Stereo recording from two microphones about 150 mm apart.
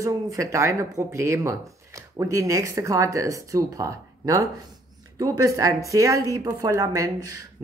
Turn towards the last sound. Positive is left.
turn(degrees=-20)  # may be behind; listen again after turning